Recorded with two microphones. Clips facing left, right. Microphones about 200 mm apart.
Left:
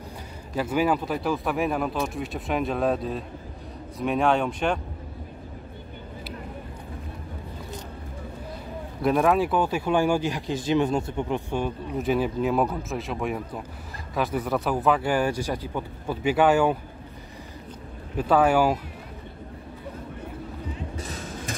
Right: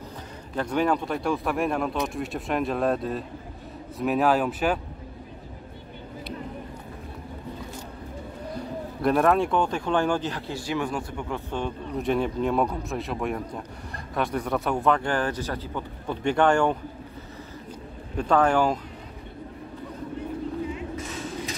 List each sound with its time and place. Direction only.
0.6 s speech: 5° left (ahead or behind)
9.0 s speech: centre (ahead or behind)
18.1 s speech: 5° left (ahead or behind)
20.7 s music: 35° left (ahead or behind)